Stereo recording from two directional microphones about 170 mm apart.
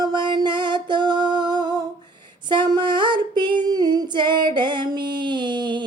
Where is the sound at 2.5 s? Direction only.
25° right (ahead or behind).